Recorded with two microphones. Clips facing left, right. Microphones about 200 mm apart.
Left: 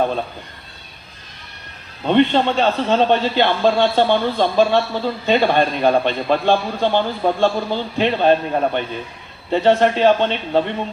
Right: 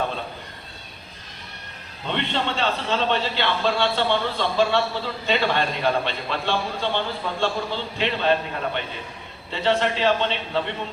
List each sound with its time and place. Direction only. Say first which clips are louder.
2.0 s a man's voice: left 11 dB; 45° left (ahead or behind)